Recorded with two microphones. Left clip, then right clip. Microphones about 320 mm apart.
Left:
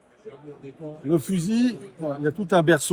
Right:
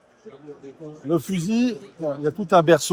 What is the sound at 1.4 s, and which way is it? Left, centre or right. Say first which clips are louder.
A man's voice: right 1 dB; centre.